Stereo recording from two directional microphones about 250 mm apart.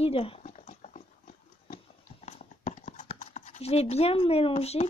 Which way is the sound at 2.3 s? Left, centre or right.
Left.